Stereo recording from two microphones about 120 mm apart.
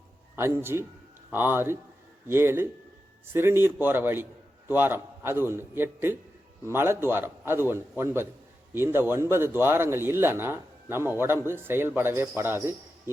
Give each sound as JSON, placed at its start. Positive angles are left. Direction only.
{"t": 0.3, "sound": "speech", "side_deg": -20}